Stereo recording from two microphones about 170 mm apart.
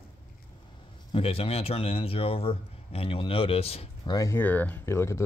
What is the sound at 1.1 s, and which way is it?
A man's voice, 35° left (ahead or behind).